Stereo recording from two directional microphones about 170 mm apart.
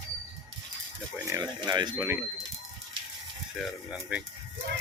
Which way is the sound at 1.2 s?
20° right (ahead or behind).